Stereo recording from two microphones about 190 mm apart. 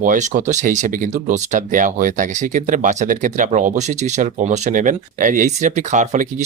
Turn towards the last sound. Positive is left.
turn(degrees=-40)  # may be behind; listen again after turning